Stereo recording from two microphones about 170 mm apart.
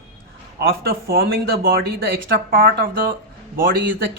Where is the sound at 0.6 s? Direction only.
60° right (ahead or behind).